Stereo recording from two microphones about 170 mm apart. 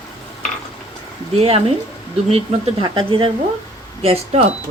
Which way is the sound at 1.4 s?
35° right (ahead or behind).